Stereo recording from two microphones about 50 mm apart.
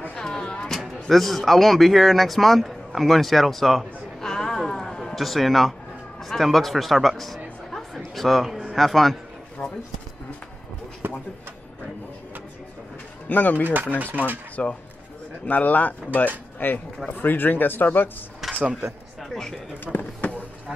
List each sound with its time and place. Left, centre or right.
0.1 s a sound: centre
0.7 s speech: centre
4.3 s a sound: centre
5.2 s speech: centre
9.6 s speech: left
11.0 s a sound: right
13.3 s speech: left
14.0 s speech: right
14.5 s speech: left
18.6 s speech: right
19.2 s speech: centre
19.8 s speech: left